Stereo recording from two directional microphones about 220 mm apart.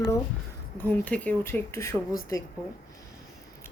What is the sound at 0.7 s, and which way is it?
A woman's voice, 10° left (ahead or behind).